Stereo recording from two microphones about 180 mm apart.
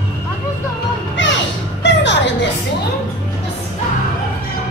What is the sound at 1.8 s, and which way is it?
Music, 75° left (ahead or behind).